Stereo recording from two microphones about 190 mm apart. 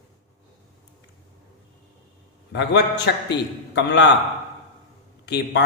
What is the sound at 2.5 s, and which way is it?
A man's voice, 65° left (ahead or behind).